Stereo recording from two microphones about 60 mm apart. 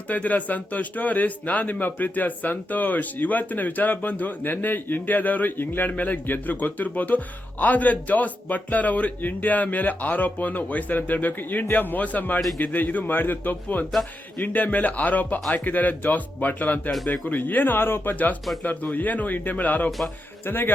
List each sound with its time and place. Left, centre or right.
0.1 s speech: left